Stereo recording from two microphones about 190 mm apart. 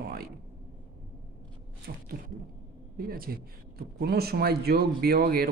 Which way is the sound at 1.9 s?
60° right (ahead or behind).